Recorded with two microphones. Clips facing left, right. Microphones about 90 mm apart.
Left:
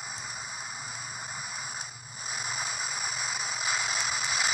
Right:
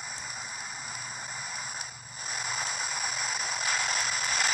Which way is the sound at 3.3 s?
60° right (ahead or behind).